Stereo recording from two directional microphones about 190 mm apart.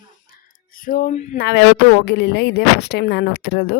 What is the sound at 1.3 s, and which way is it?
Speech, 55° left (ahead or behind).